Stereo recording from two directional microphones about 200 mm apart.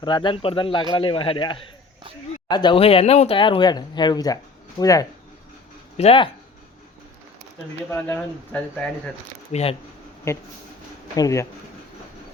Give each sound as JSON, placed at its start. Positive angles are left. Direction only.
{"t": 0.0, "sound": "speech", "side_deg": 20}
{"t": 6.0, "sound": "speech", "side_deg": 30}
{"t": 7.9, "sound": "speech", "side_deg": 10}
{"t": 9.5, "sound": "speech", "side_deg": 30}
{"t": 11.2, "sound": "speech", "side_deg": 15}